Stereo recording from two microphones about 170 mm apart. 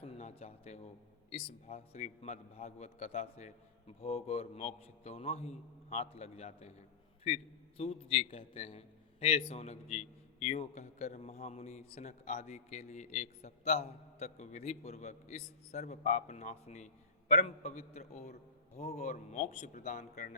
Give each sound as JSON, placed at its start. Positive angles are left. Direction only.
{"t": 0.0, "sound": "a sound", "side_deg": 40}
{"t": 1.3, "sound": "a man's voice", "side_deg": 40}
{"t": 7.8, "sound": "a man's voice", "side_deg": 35}